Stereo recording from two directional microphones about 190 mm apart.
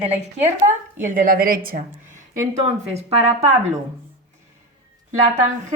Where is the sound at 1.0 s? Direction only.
45° right (ahead or behind).